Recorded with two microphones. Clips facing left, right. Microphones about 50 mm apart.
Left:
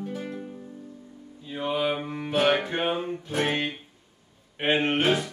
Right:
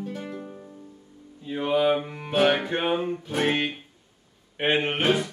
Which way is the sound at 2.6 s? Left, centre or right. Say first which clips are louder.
Right 2 dB; centre.